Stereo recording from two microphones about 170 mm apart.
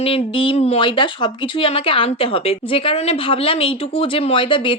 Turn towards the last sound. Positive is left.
turn(degrees=30)  # may be behind; listen again after turning